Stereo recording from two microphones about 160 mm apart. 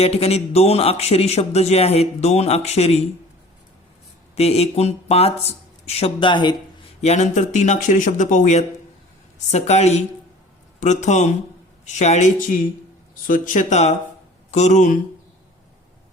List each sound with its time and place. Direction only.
0.0 s a man's voice: 40° left (ahead or behind)
4.4 s a man's voice: 40° left (ahead or behind)
7.0 s speech: 45° left (ahead or behind)
13.2 s speech: 60° left (ahead or behind)